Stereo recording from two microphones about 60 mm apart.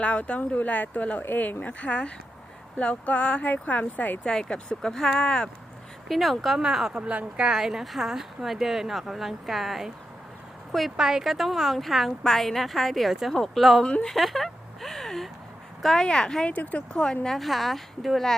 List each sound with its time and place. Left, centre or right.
0.0 s speech: left
4.2 s speech: centre
6.1 s speech: centre
7.0 s speech: right; by 13.8 s centre
13.8 s speech: centre
14.2 s a sound: centre
15.8 s speech: centre
16.5 s speech: left
17.2 s speech: centre